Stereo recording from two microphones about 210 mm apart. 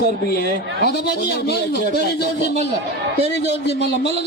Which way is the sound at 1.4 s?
50° left (ahead or behind).